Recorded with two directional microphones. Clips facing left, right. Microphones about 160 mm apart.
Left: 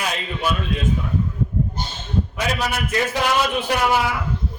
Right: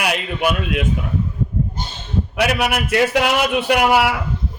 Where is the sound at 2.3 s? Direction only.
70° right (ahead or behind).